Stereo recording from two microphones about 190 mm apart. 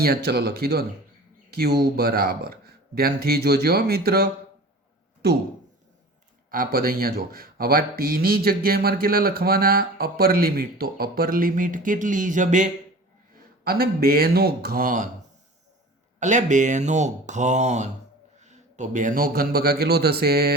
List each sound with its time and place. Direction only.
0.0 s speech: 55° right (ahead or behind)
6.5 s speech: 50° right (ahead or behind)
16.2 s a man's voice: 40° right (ahead or behind)